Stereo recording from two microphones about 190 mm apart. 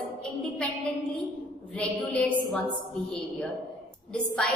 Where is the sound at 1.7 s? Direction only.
5° left (ahead or behind).